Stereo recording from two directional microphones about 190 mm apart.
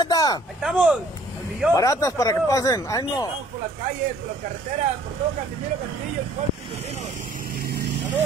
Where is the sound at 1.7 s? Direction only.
15° left (ahead or behind).